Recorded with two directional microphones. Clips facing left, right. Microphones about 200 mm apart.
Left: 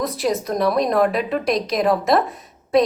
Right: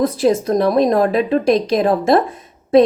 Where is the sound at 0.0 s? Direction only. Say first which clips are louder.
Right 7 dB; 30° right (ahead or behind).